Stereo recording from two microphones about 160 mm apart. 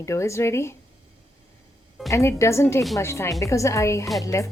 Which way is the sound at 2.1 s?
20° left (ahead or behind).